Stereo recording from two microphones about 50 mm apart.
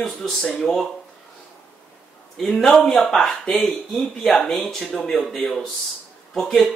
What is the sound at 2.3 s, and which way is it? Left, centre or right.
Speech, centre.